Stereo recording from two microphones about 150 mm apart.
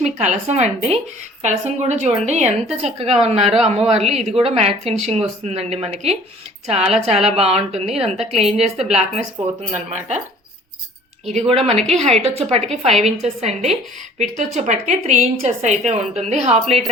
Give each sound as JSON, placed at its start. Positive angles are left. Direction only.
{"t": 0.0, "sound": "a woman's voice", "side_deg": -50}
{"t": 11.4, "sound": "a woman's voice", "side_deg": -40}